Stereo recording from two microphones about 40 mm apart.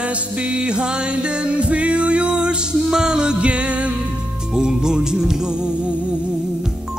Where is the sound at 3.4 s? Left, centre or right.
Right.